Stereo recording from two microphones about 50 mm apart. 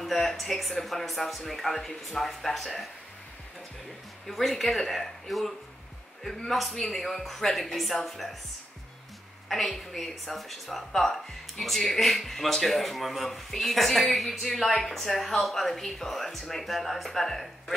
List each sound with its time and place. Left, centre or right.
0.0 s speech: centre
4.3 s speech: centre
9.5 s speech: centre